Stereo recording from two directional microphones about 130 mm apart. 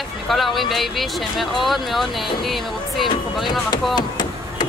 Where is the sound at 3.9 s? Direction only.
35° left (ahead or behind).